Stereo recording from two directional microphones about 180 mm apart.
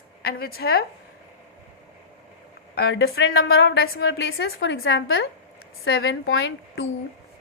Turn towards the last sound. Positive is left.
turn(degrees=90)